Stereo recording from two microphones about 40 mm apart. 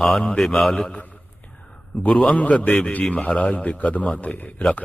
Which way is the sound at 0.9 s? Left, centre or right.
Left.